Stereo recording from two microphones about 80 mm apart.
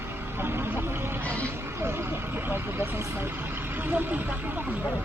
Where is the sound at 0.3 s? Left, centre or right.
Right.